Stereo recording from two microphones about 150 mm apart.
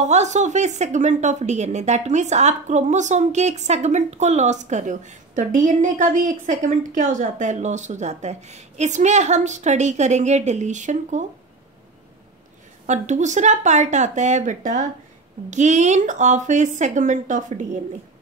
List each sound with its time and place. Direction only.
0.0 s a woman's voice: 50° right (ahead or behind)
12.8 s a woman's voice: 55° right (ahead or behind)